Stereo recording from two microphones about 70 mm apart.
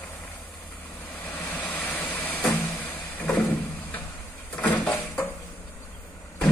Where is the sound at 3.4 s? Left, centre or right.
Left.